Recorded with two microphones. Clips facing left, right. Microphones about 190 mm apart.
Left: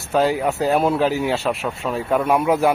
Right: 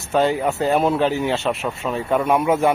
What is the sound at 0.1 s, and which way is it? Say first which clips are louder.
Speech: even; centre (ahead or behind).